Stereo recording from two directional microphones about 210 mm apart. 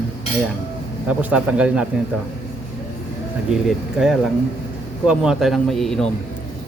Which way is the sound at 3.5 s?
Centre (ahead or behind).